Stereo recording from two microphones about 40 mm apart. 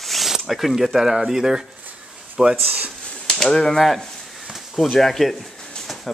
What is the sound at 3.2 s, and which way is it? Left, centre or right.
Speech, centre.